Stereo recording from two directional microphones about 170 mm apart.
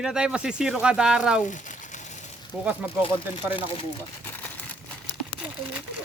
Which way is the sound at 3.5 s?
30° left (ahead or behind).